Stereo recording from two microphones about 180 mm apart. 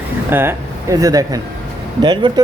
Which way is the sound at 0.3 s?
10° right (ahead or behind).